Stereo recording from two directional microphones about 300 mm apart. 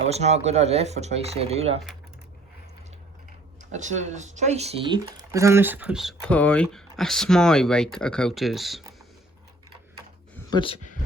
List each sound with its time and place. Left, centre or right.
0.1 s speech: right
3.7 s speech: right; by 8.8 s centre
10.3 s a sound: centre